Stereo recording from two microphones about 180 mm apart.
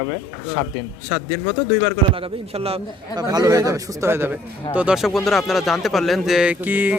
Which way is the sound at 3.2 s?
20° right (ahead or behind).